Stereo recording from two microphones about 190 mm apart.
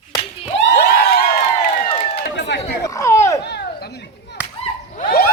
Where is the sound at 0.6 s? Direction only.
65° left (ahead or behind).